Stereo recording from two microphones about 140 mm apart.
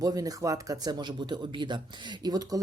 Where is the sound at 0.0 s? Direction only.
25° right (ahead or behind).